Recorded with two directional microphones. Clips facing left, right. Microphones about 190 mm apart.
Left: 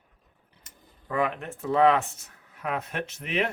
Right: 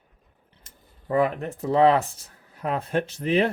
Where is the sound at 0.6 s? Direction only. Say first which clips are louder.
Even; 35° right (ahead or behind).